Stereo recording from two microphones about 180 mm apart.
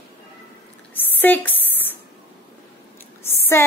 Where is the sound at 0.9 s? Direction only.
10° left (ahead or behind).